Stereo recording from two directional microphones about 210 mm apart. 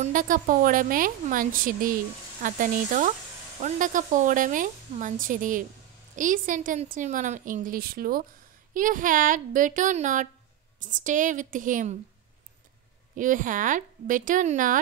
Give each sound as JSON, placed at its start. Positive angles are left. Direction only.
{"t": 0.0, "sound": "a woman's voice", "side_deg": -40}
{"t": 13.1, "sound": "a woman's voice", "side_deg": -40}